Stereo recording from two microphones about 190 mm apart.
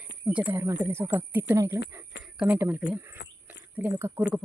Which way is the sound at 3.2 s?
70° left (ahead or behind).